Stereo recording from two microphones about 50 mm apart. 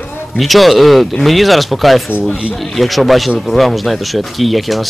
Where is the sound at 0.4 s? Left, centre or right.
Centre.